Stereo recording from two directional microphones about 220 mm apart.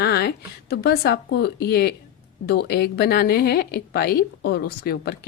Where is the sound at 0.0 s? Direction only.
45° left (ahead or behind).